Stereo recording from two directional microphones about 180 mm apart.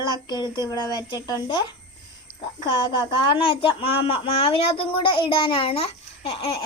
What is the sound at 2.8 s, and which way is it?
Speech, 25° left (ahead or behind).